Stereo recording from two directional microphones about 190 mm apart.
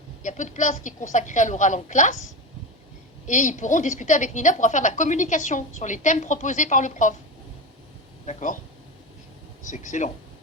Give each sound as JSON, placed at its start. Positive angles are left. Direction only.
{"t": 0.2, "sound": "a woman's voice", "side_deg": 40}
{"t": 3.2, "sound": "a woman's voice", "side_deg": 40}
{"t": 8.3, "sound": "a woman's voice", "side_deg": 40}
{"t": 9.6, "sound": "a woman's voice", "side_deg": 40}